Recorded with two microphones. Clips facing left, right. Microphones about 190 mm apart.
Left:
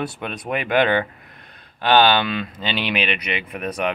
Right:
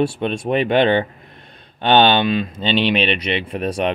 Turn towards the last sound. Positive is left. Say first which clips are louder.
# right 5 dB
turn(degrees=-30)  # may be behind; listen again after turning